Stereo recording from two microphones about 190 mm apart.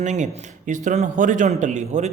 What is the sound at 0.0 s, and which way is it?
A man's voice, 40° right (ahead or behind).